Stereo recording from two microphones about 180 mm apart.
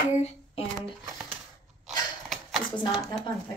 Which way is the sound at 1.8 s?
Centre (ahead or behind).